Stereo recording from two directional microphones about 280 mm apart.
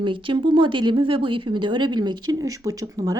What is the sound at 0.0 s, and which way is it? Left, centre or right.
Speech, centre.